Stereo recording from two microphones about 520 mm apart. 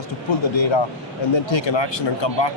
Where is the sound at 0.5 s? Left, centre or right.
Left.